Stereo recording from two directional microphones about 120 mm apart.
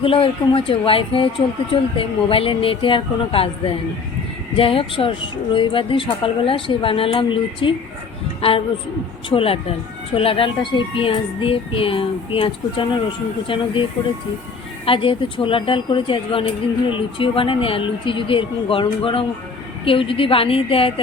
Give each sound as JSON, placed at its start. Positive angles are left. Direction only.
{"t": 0.0, "sound": "speech", "side_deg": 50}
{"t": 14.8, "sound": "speech", "side_deg": 45}